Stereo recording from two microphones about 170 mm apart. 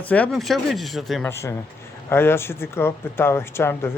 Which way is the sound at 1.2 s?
15° left (ahead or behind).